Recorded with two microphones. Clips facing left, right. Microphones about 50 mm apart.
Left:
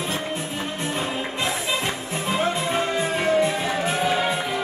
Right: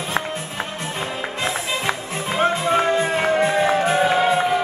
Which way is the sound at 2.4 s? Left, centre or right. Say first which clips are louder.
Right 7 dB; right.